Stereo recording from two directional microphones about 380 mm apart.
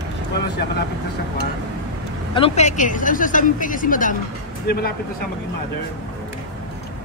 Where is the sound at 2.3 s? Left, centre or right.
Centre.